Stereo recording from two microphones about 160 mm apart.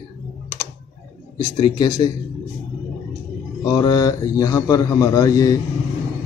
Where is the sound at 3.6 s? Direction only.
25° left (ahead or behind).